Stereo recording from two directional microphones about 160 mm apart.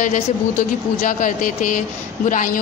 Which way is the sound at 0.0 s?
50° left (ahead or behind).